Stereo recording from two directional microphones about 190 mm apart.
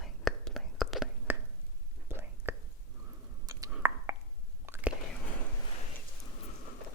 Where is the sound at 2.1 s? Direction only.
10° right (ahead or behind).